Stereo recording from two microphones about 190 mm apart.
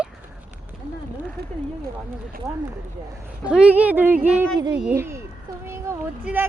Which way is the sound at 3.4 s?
5° right (ahead or behind).